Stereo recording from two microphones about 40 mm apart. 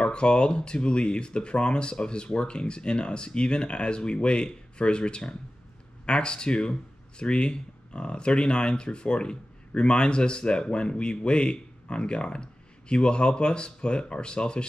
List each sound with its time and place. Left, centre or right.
0.0 s speech: left